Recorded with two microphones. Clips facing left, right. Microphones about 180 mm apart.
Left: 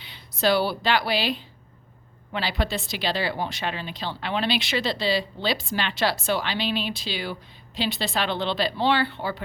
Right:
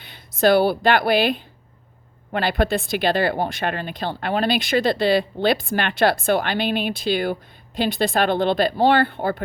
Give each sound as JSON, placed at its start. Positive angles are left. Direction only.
{"t": 0.0, "sound": "speech", "side_deg": -50}